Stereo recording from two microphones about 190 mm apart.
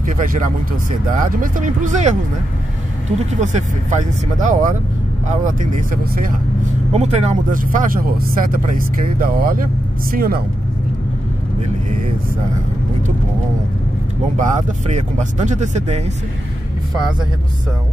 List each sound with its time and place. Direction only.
0.0 s speech: 45° right (ahead or behind)
3.3 s speech: 40° right (ahead or behind)
14.3 s speech: 40° right (ahead or behind)